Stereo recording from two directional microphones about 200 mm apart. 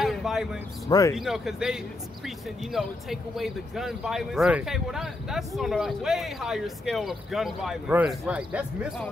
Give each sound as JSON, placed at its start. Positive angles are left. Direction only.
{"t": 0.0, "sound": "a sound", "side_deg": 0}
{"t": 0.8, "sound": "speech", "side_deg": 15}
{"t": 1.1, "sound": "speech", "side_deg": 0}